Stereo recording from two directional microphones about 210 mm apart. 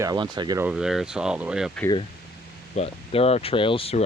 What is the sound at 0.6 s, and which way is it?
Speech, 5° right (ahead or behind).